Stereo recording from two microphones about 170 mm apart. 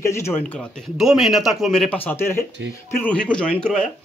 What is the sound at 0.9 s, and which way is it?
A man's voice, centre (ahead or behind).